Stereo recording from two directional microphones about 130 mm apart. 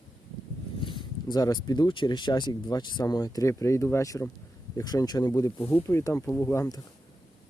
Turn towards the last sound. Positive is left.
turn(degrees=25)  # may be behind; listen again after turning